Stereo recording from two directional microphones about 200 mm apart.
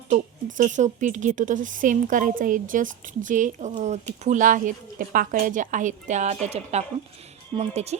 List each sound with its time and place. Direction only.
0.1 s a woman's voice: 40° right (ahead or behind)